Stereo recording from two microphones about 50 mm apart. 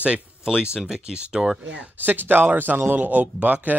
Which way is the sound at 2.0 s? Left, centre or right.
Right.